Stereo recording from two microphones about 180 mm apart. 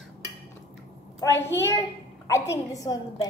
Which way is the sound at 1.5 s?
15° left (ahead or behind).